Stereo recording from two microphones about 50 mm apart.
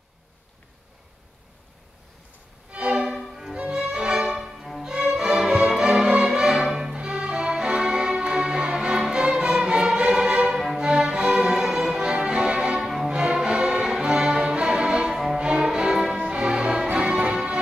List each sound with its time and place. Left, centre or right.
2.7 s violin: centre
3.2 s violin: centre
3.5 s music: right; by 4.8 s centre
4.8 s music: centre
15.3 s violin: centre
16.2 s music: centre